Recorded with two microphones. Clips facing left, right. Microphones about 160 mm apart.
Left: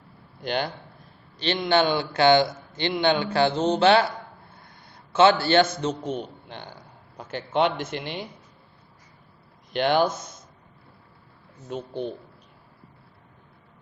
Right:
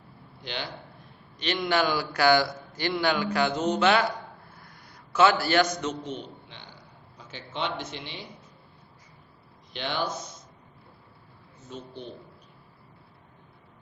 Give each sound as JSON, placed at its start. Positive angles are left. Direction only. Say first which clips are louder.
{"t": 0.4, "sound": "a man's voice", "louder": "left 9 dB", "side_deg": 50}
{"t": 1.4, "sound": "a man's voice", "louder": "left 4 dB", "side_deg": 30}
{"t": 5.1, "sound": "a man's voice", "louder": "left 4 dB", "side_deg": 25}
{"t": 6.1, "sound": "a sound", "louder": "left 6 dB", "side_deg": 50}
{"t": 7.2, "sound": "a man's voice", "louder": "left 10 dB", "side_deg": 55}
{"t": 9.7, "sound": "a man's voice", "louder": "left 10 dB", "side_deg": 55}
{"t": 11.7, "sound": "a man's voice", "louder": "left 8 dB", "side_deg": 60}